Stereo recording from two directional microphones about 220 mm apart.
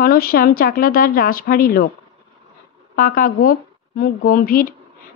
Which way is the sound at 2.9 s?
40° left (ahead or behind).